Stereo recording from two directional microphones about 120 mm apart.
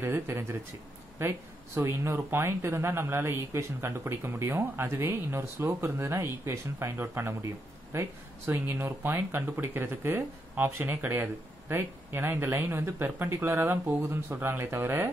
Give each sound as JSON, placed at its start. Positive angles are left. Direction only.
{"t": 0.0, "sound": "speech", "side_deg": -20}